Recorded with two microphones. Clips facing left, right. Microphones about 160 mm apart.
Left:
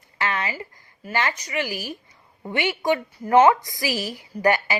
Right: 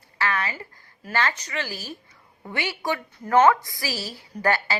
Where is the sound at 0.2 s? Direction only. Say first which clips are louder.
Even; 20° left (ahead or behind).